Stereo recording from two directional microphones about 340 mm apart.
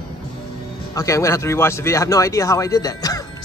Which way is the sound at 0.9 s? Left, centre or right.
Centre.